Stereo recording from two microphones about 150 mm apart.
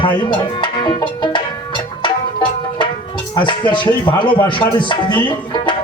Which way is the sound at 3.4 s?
30° left (ahead or behind).